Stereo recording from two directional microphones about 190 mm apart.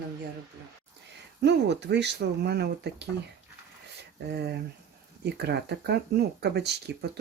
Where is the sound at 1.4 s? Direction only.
65° right (ahead or behind).